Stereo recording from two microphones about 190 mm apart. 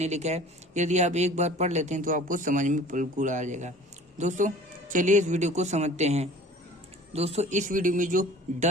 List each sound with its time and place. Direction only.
0.0 s speech: 35° right (ahead or behind)